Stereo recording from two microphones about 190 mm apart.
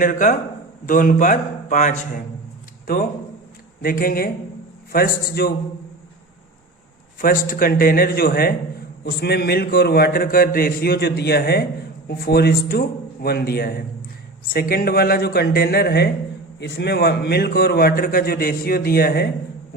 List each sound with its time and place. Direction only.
0.0 s speech: 45° left (ahead or behind)
2.8 s a man's voice: 50° left (ahead or behind)
7.2 s a man's voice: 50° left (ahead or behind)